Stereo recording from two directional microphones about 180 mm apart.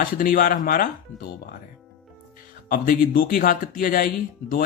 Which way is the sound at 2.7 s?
50° left (ahead or behind).